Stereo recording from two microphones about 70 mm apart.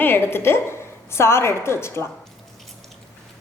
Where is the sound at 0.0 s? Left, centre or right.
Left.